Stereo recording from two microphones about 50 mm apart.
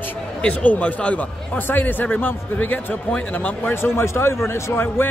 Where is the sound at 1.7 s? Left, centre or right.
Left.